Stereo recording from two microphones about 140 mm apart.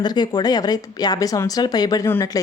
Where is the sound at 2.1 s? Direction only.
15° left (ahead or behind).